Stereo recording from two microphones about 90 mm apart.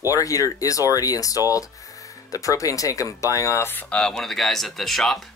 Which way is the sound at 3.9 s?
5° left (ahead or behind).